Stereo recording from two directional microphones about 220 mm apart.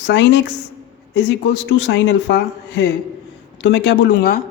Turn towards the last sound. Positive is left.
turn(degrees=50)  # may be behind; listen again after turning